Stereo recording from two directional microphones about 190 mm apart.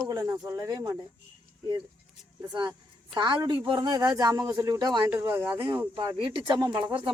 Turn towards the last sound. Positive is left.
turn(degrees=-25)  # may be behind; listen again after turning